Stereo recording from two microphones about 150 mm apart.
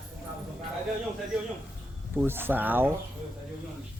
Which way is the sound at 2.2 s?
15° right (ahead or behind).